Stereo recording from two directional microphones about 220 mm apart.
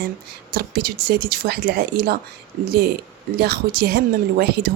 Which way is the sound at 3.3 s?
45° right (ahead or behind).